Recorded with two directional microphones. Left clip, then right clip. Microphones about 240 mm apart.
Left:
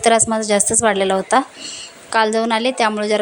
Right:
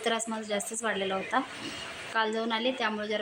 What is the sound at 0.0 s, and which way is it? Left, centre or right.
A woman's voice, left.